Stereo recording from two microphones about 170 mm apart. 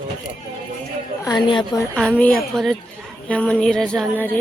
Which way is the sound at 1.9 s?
5° left (ahead or behind).